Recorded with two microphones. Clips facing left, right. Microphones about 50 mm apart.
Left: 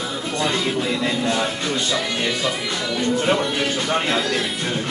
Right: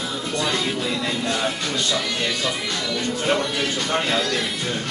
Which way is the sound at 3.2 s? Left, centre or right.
Centre.